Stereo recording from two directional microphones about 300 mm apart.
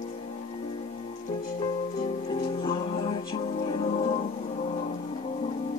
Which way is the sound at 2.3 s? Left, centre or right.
Centre.